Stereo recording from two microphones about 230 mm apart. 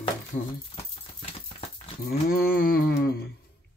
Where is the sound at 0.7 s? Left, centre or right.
Left.